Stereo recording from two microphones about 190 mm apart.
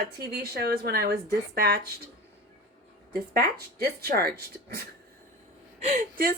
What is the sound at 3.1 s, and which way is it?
A woman's voice, 55° right (ahead or behind).